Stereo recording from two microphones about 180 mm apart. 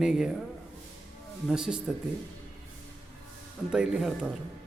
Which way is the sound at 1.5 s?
5° right (ahead or behind).